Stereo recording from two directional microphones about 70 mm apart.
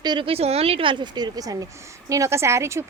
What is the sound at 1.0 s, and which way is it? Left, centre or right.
Speech, right.